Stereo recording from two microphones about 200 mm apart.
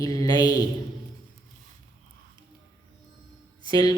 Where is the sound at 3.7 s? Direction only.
20° left (ahead or behind).